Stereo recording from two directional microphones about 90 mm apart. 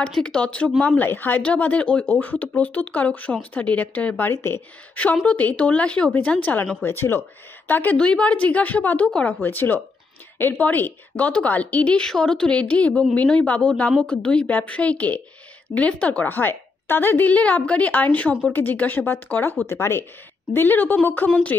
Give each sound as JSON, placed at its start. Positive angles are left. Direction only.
{"t": 0.1, "sound": "a woman's voice", "side_deg": 10}
{"t": 5.2, "sound": "a woman's voice", "side_deg": 15}